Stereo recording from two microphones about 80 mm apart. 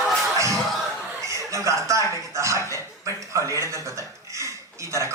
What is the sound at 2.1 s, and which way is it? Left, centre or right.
Speech, right.